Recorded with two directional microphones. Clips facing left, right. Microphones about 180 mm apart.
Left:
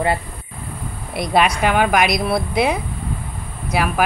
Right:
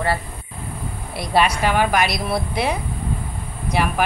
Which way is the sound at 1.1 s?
15° left (ahead or behind).